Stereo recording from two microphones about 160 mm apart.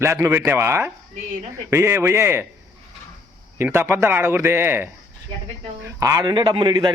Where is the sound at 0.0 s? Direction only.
15° right (ahead or behind).